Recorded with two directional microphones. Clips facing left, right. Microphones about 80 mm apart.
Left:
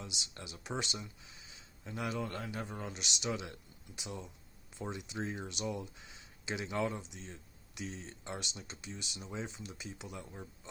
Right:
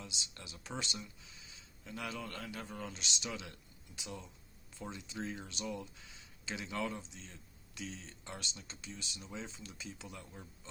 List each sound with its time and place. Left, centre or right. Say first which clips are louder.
0.2 s speech: left 3 dB; left